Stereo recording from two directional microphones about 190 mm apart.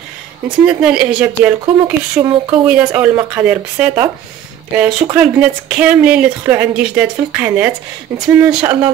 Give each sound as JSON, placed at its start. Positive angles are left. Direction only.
{"t": 0.7, "sound": "speech", "side_deg": -5}